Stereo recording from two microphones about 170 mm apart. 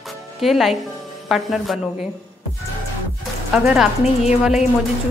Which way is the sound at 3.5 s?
5° right (ahead or behind).